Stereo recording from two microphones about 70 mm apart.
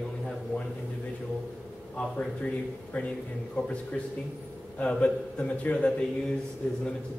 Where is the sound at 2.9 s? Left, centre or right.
Centre.